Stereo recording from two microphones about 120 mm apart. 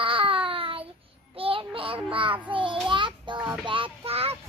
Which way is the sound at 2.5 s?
45° right (ahead or behind).